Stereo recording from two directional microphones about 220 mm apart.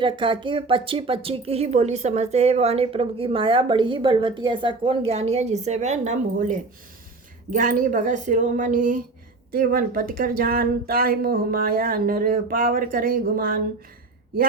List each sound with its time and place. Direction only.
0.0 s speech: 20° right (ahead or behind); by 13.6 s 40° right (ahead or behind)